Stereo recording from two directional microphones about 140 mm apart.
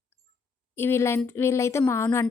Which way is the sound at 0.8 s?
15° left (ahead or behind).